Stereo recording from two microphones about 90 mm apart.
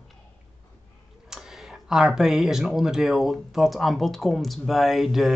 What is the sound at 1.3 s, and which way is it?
Speech, 5° right (ahead or behind).